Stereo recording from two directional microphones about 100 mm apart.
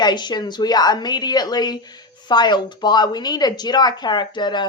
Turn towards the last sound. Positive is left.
turn(degrees=50)  # may be behind; listen again after turning